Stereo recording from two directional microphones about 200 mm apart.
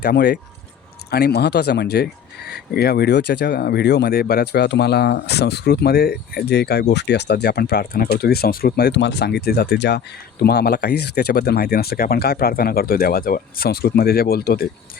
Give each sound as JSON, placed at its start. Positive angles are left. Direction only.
{"t": 0.0, "sound": "speech", "side_deg": 55}